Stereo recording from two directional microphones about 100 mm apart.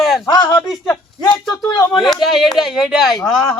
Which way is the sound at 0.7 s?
40° left (ahead or behind).